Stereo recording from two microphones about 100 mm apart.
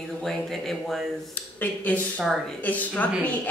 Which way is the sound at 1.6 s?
15° left (ahead or behind).